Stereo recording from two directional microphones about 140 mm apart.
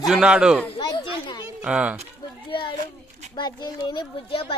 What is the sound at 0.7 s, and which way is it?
Speech, 35° left (ahead or behind).